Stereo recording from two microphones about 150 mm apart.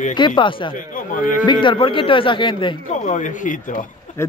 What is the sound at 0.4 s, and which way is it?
A man's voice, 35° left (ahead or behind).